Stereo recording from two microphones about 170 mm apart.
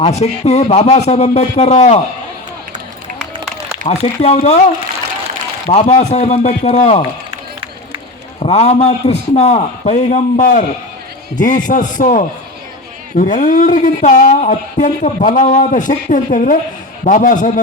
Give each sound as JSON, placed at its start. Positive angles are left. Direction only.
{"t": 0.0, "sound": "a man's voice", "side_deg": 40}
{"t": 3.8, "sound": "a man's voice", "side_deg": 40}
{"t": 5.6, "sound": "a man's voice", "side_deg": 40}
{"t": 8.4, "sound": "a man's voice", "side_deg": 40}